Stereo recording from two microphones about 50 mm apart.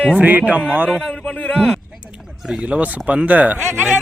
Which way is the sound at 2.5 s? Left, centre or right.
Right.